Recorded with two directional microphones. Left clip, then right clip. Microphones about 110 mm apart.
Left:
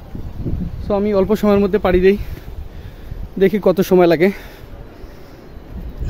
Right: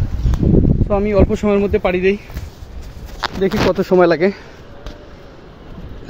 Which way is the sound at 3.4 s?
90° left.